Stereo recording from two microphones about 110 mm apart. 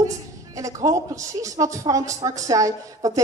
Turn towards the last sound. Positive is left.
turn(degrees=-30)  # may be behind; listen again after turning